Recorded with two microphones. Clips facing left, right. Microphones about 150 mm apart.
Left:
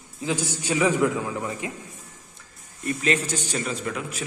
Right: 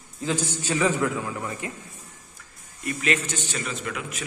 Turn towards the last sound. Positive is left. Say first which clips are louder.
# left 2 dB
turn(degrees=30)  # may be behind; listen again after turning